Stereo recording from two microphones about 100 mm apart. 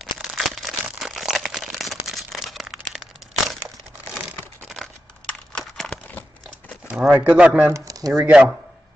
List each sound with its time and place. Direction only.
0.0 s crumpling: centre (ahead or behind)
5.5 s crushing: 5° left (ahead or behind)
6.9 s a sound: 15° right (ahead or behind)
7.2 s speech: 15° right (ahead or behind)
7.7 s speech: 35° right (ahead or behind)
8.1 s speech: 10° right (ahead or behind)